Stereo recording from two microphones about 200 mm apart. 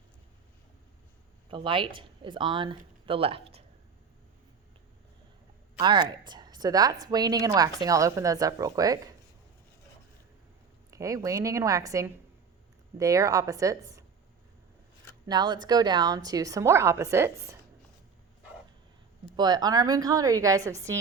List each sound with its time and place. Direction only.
1.5 s speech: 25° right (ahead or behind)
5.8 s a woman's voice: 20° right (ahead or behind)
10.9 s a woman's voice: 15° right (ahead or behind)
15.3 s a woman's voice: 20° right (ahead or behind)
19.2 s a woman's voice: 20° right (ahead or behind)